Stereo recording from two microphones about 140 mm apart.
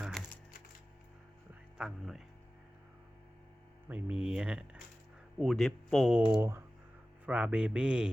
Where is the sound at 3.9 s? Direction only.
10° right (ahead or behind).